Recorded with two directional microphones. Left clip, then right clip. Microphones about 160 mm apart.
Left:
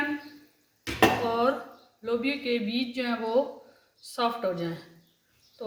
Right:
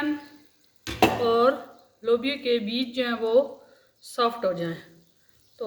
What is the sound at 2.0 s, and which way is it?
A woman's voice, 35° right (ahead or behind).